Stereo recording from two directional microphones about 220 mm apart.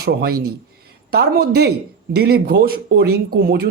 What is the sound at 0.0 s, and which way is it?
Speech, 45° right (ahead or behind).